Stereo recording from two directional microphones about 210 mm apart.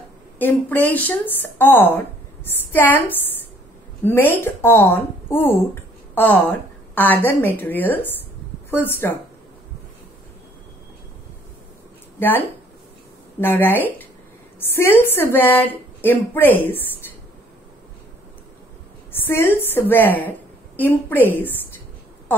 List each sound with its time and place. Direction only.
0.4 s a woman's voice: 10° left (ahead or behind)
12.2 s a woman's voice: 10° left (ahead or behind)
19.1 s a woman's voice: 10° left (ahead or behind)